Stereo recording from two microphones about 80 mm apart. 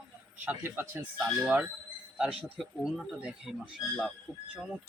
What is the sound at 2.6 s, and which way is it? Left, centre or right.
Speech, centre.